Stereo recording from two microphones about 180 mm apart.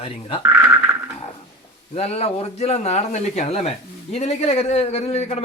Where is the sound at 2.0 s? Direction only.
35° left (ahead or behind).